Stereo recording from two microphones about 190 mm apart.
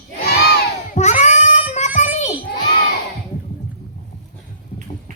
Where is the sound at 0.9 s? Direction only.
35° left (ahead or behind).